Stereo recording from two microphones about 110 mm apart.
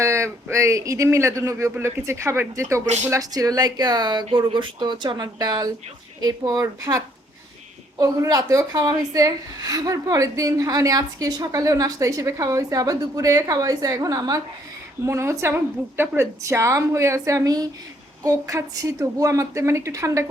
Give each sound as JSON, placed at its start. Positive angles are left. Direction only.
{"t": 0.0, "sound": "a woman's voice", "side_deg": -25}
{"t": 2.8, "sound": "speech", "side_deg": -90}
{"t": 3.1, "sound": "a woman's voice", "side_deg": -35}